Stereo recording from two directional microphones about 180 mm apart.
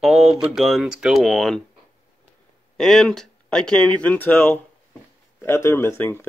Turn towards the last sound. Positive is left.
turn(degrees=10)  # may be behind; listen again after turning